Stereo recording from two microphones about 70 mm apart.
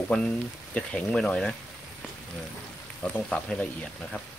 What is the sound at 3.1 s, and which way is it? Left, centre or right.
Speech, centre.